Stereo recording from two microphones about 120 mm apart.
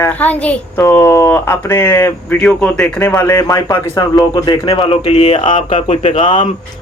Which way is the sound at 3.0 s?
20° left (ahead or behind).